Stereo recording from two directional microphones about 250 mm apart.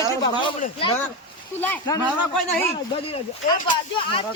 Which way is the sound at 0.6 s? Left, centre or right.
Left.